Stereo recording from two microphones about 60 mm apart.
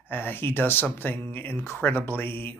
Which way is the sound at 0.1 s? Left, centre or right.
Left.